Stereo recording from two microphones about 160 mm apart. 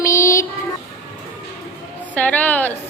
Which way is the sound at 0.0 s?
20° left (ahead or behind).